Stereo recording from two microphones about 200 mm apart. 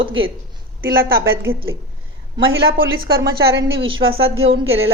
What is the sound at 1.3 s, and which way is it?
Speech, 80° right.